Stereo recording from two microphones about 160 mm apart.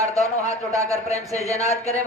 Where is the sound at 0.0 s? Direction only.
20° right (ahead or behind).